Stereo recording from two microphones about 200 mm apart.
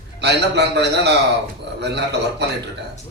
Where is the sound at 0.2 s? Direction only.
60° right (ahead or behind).